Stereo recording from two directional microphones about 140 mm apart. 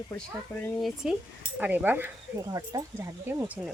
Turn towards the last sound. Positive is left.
turn(degrees=-15)  # may be behind; listen again after turning